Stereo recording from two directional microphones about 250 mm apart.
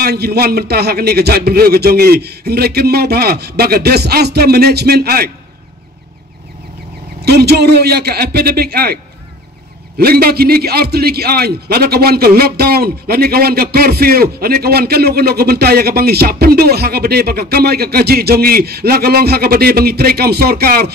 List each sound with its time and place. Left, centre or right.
0.0 s a man's voice: right
7.2 s a man's voice: right